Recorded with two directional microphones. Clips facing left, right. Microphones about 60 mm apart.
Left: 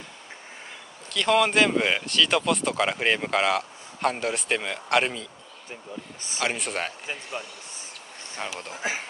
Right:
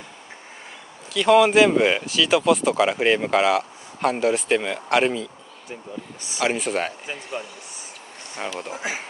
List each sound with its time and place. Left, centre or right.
1.1 s speech: centre
6.4 s speech: centre